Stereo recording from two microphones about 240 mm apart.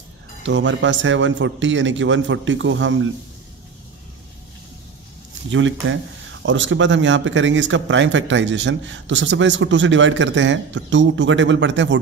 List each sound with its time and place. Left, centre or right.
0.5 s speech: right
5.5 s speech: right